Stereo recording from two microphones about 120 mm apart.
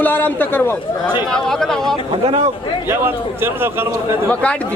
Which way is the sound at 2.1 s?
60° right (ahead or behind).